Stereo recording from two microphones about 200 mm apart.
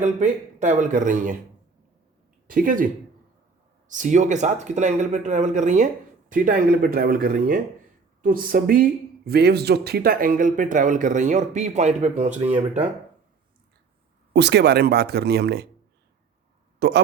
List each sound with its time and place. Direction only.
0.0 s speech: 35° right (ahead or behind)
2.5 s speech: 45° right (ahead or behind)
14.3 s speech: 60° right (ahead or behind)
16.8 s speech: 55° right (ahead or behind)